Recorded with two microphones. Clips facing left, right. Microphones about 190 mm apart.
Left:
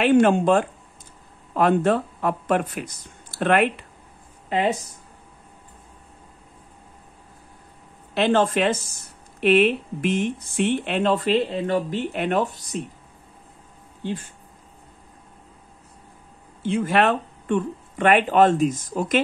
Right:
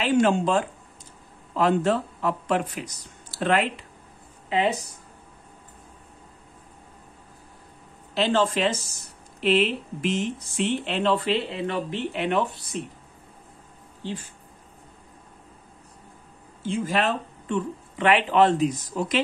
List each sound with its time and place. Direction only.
0.0 s speech: 55° left (ahead or behind)
8.1 s speech: 55° left (ahead or behind)
16.6 s speech: 65° left (ahead or behind)